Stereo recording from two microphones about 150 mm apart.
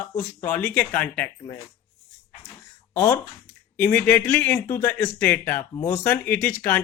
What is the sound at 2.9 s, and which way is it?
Speech, 15° left (ahead or behind).